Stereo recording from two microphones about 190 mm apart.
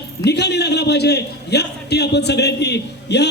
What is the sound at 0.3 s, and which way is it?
A man's voice, 60° left (ahead or behind).